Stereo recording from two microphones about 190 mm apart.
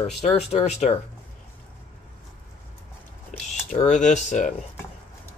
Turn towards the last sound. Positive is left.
turn(degrees=40)  # may be behind; listen again after turning